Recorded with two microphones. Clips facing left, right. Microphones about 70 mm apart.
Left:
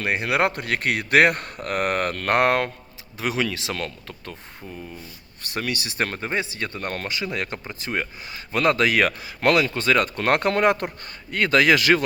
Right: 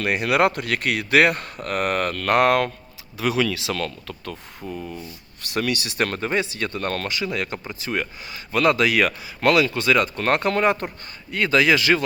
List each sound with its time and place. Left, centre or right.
0.0 s speech: left
4.7 s speech: centre
5.5 s speech: left
7.1 s speech: left